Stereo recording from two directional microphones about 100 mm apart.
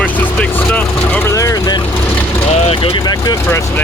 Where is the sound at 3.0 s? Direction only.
40° left (ahead or behind).